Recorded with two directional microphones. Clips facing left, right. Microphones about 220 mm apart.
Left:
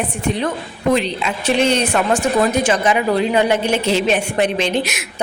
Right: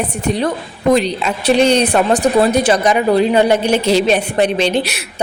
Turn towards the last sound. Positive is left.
turn(degrees=-35)  # may be behind; listen again after turning